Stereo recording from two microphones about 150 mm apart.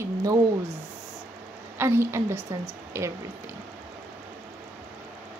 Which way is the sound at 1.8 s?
20° right (ahead or behind).